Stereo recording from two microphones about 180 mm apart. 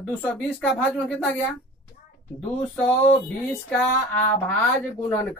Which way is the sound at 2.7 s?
10° left (ahead or behind).